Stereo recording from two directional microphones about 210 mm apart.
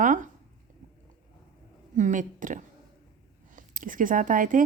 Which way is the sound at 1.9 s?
35° right (ahead or behind).